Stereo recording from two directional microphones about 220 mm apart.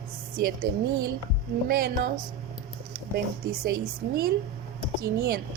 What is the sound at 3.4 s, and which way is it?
Speech, 45° right (ahead or behind).